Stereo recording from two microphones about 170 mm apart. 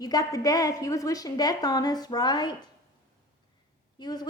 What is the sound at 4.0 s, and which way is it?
Speech, 25° left (ahead or behind).